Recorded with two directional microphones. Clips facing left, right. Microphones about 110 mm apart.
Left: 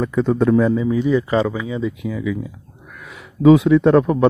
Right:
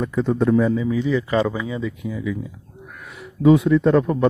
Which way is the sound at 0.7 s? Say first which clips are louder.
Left 3 dB; 35° left (ahead or behind).